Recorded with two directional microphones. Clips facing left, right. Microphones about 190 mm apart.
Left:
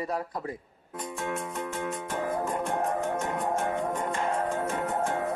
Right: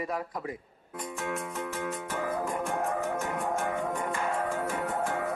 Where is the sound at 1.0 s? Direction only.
25° left (ahead or behind).